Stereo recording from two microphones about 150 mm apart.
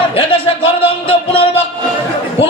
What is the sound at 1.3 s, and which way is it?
Music, 40° left (ahead or behind).